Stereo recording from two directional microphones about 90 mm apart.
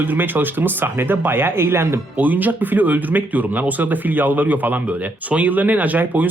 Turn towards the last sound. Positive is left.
turn(degrees=-20)  # may be behind; listen again after turning